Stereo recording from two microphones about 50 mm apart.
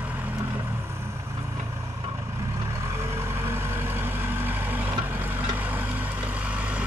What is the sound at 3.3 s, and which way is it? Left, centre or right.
Vehicle, right.